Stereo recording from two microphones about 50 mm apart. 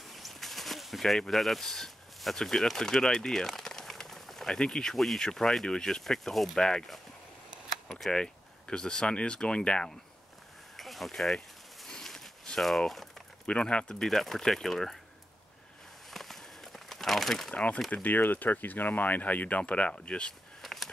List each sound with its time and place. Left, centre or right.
0.1 s speech: centre
10.8 s a sound: centre
13.5 s speech: left
14.0 s speech: centre
16.1 s crumpling: centre
17.9 s speech: left
20.6 s a sound: centre